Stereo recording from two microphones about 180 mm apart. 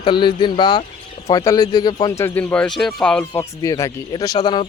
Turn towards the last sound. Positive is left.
turn(degrees=25)  # may be behind; listen again after turning